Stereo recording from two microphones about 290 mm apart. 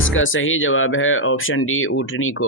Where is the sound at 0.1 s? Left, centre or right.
Left.